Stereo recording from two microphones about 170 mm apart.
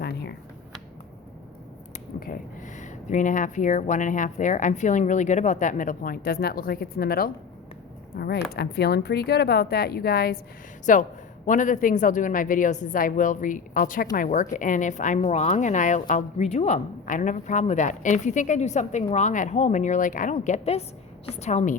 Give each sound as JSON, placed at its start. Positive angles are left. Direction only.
{"t": 0.0, "sound": "computer keyboard", "side_deg": 70}
{"t": 2.1, "sound": "speech", "side_deg": 60}
{"t": 10.9, "sound": "a woman's voice", "side_deg": 50}